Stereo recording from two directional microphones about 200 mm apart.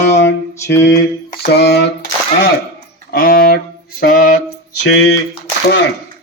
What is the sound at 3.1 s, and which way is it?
Speech, 45° left (ahead or behind).